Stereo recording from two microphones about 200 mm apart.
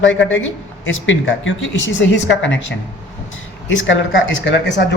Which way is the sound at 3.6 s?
70° left (ahead or behind).